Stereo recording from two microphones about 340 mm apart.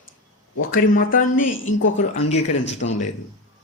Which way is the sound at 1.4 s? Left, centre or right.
Left.